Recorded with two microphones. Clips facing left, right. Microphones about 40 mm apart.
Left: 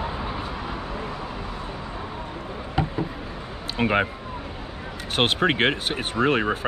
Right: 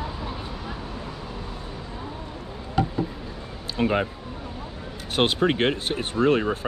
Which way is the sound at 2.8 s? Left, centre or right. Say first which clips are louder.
Right 2 dB; centre.